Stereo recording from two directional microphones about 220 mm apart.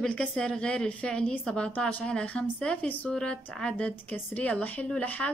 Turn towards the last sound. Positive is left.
turn(degrees=5)  # may be behind; listen again after turning